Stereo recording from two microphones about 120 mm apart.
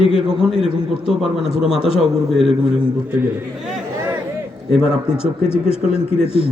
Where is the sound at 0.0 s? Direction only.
50° left (ahead or behind).